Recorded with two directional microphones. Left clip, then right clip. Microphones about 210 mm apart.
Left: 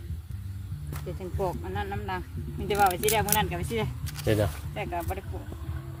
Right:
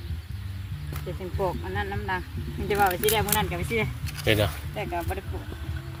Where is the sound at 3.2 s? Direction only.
20° left (ahead or behind).